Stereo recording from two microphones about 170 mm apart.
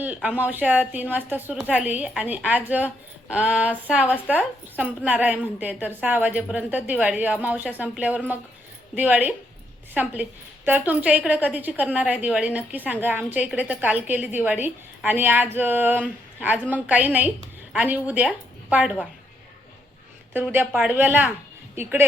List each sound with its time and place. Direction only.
0.0 s a woman's voice: 10° right (ahead or behind)
20.3 s a woman's voice: 10° right (ahead or behind)